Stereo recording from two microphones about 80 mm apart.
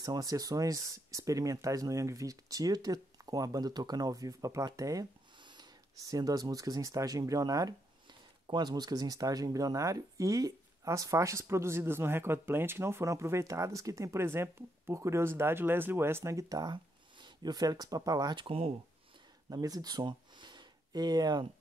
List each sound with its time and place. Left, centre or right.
0.0 s speech: right
5.4 s wheeze: right
5.9 s speech: right
8.5 s speech: right
16.7 s speech: right
19.5 s speech: right